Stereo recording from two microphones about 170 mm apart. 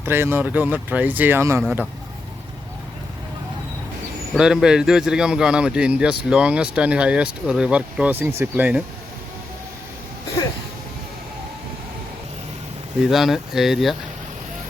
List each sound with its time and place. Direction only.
0.0 s speech: 15° right (ahead or behind)
4.4 s a man's voice: 5° right (ahead or behind)
13.1 s a man's voice: centre (ahead or behind)